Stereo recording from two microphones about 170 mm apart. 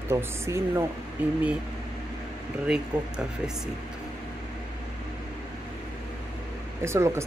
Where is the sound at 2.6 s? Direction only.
5° right (ahead or behind).